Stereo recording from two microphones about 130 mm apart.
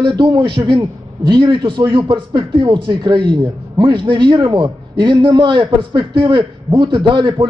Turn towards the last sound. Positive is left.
turn(degrees=-35)  # may be behind; listen again after turning